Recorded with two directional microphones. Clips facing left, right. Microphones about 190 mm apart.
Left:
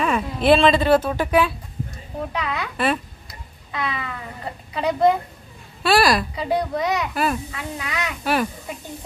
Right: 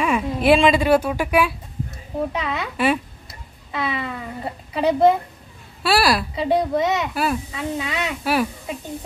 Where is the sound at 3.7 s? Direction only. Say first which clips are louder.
Right 2 dB; 25° right (ahead or behind).